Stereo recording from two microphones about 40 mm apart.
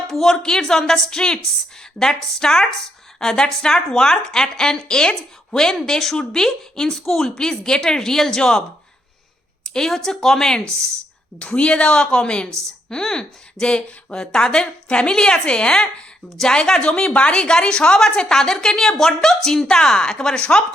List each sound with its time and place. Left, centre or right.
0.1 s a woman's voice: centre
9.6 s a woman's voice: centre
11.3 s a woman's voice: left